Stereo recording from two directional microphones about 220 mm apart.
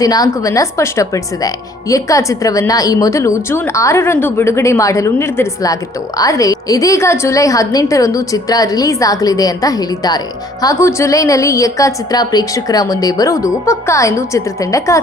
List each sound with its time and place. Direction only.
0.0 s speech: 15° left (ahead or behind)